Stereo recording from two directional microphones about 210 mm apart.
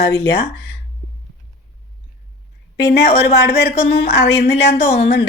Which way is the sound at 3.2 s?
50° left (ahead or behind).